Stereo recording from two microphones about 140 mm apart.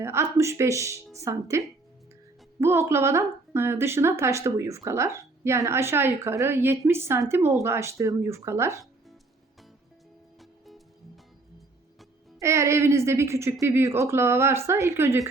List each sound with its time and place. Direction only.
0.0 s a woman's voice: 20° right (ahead or behind)
12.4 s a woman's voice: 20° right (ahead or behind)